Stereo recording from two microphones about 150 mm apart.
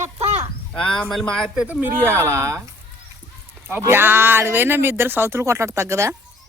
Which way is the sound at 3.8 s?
15° right (ahead or behind).